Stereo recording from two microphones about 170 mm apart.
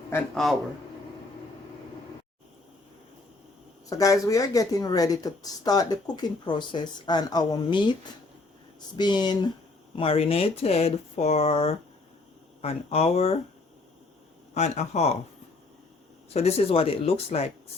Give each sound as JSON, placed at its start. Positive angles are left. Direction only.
{"t": 3.8, "sound": "speech", "side_deg": 20}
{"t": 9.0, "sound": "speech", "side_deg": 25}
{"t": 14.5, "sound": "speech", "side_deg": 40}
{"t": 16.3, "sound": "speech", "side_deg": 40}